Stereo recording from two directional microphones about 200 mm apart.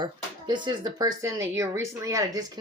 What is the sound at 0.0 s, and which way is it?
Speech, 20° right (ahead or behind).